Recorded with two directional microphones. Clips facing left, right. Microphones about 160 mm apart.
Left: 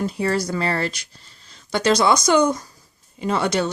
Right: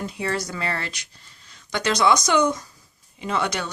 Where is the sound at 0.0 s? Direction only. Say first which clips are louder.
Left 5 dB; 35° left (ahead or behind).